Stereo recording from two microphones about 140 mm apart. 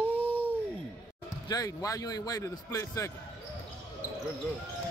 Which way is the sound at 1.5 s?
25° left (ahead or behind).